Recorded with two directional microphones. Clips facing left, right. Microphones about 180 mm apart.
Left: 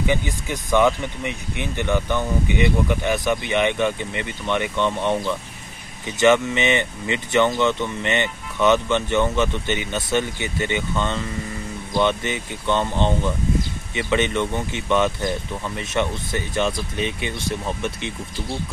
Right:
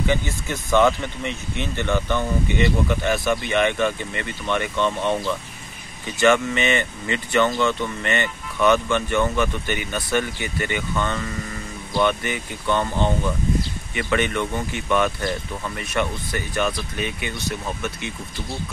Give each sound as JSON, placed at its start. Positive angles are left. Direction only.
{"t": 0.0, "sound": "speech", "side_deg": 15}